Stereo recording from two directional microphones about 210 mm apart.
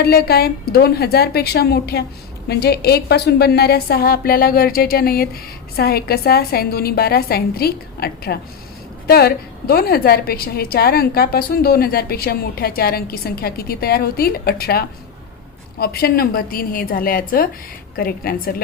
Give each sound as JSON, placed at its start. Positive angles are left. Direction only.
{"t": 0.0, "sound": "a woman's voice", "side_deg": 45}